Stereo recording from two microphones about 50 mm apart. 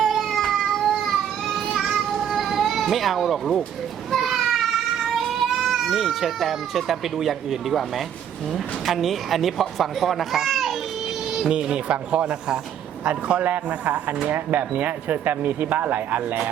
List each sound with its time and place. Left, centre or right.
0.0 s cat: centre
1.7 s children playing: centre
4.1 s a sound: centre
8.5 s speech: centre
11.4 s speech: centre
14.3 s speech: right